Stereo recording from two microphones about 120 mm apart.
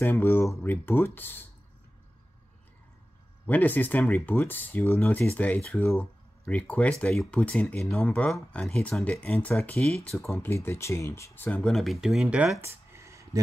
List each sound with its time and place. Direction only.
0.0 s speech: 15° left (ahead or behind)
3.4 s speech: 15° left (ahead or behind)
11.7 s speech: centre (ahead or behind)
12.6 s a sound: 25° right (ahead or behind)